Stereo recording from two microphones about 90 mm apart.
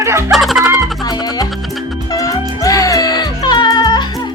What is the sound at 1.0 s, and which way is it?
Music, 45° left (ahead or behind).